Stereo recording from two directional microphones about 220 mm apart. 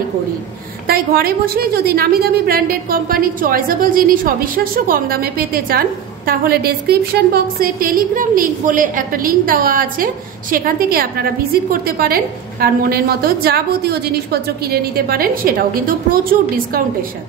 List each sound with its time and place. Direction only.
0.8 s a woman's voice: 45° right (ahead or behind)